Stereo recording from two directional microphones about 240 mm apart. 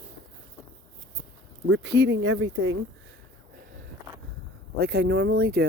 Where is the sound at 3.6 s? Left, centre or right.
Right.